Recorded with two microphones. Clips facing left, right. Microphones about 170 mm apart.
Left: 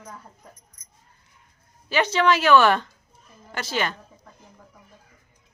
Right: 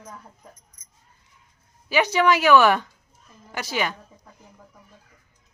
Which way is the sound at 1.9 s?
15° right (ahead or behind).